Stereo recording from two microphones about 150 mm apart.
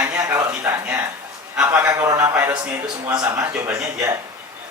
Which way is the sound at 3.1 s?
25° right (ahead or behind).